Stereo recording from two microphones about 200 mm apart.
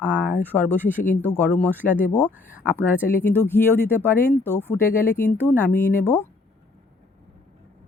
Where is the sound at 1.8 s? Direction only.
40° left (ahead or behind).